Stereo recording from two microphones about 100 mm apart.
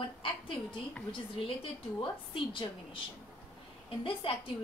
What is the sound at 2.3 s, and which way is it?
Speech, 55° left (ahead or behind).